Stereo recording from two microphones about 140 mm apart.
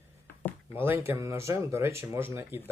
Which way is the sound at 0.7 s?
15° right (ahead or behind).